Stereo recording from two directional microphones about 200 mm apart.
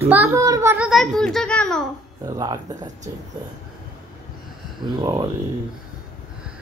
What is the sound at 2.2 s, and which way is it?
Speech, 20° right (ahead or behind).